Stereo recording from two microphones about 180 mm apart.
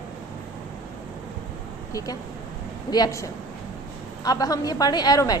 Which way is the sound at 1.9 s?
20° left (ahead or behind).